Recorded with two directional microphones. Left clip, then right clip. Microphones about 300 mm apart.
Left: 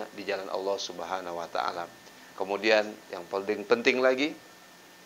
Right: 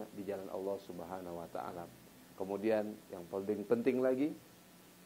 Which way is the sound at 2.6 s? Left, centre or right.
Centre.